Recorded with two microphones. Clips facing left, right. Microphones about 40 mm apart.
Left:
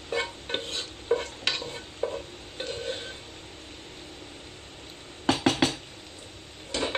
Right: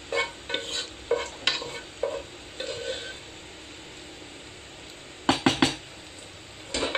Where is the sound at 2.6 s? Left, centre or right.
Right.